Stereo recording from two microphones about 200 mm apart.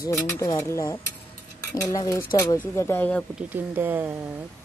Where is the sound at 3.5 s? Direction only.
10° right (ahead or behind).